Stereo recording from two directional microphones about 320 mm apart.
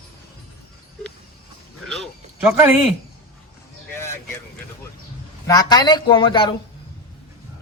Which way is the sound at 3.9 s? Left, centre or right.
Centre.